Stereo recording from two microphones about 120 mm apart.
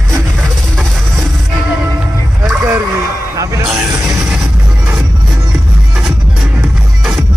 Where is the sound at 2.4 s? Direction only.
25° right (ahead or behind).